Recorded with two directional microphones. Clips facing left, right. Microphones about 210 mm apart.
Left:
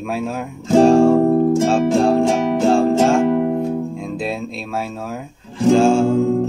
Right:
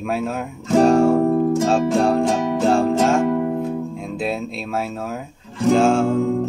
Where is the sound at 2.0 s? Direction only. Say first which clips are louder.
Left 4 dB; centre (ahead or behind).